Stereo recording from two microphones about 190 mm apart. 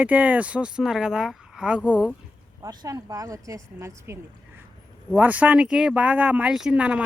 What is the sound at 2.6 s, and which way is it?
A woman's voice, 15° right (ahead or behind).